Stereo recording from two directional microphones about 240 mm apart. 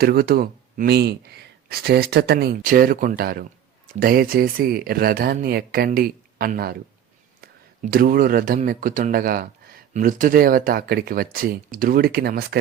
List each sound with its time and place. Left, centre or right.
0.0 s speech: right